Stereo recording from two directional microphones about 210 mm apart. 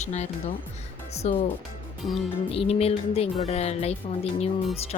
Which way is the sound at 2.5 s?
30° left (ahead or behind).